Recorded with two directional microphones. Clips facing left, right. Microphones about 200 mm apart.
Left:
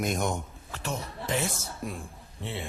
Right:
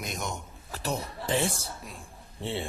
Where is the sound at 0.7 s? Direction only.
35° right (ahead or behind).